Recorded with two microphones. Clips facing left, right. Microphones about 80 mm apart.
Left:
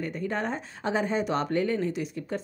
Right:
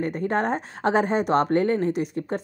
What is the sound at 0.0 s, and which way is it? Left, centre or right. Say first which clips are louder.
Speech: right 6 dB; right.